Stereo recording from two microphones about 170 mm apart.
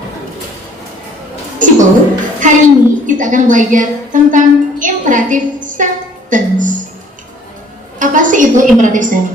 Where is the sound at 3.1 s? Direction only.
50° right (ahead or behind).